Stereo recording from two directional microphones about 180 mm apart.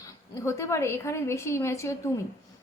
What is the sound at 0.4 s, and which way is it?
A woman's voice, 15° left (ahead or behind).